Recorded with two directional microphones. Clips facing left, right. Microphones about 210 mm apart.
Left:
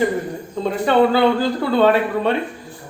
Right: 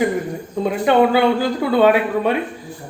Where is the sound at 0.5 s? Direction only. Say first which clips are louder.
Right 1 dB; 10° right (ahead or behind).